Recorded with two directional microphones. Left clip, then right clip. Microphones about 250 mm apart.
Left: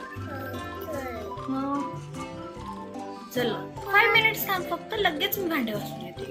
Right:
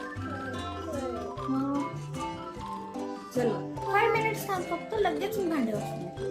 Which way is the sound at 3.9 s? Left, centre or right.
Centre.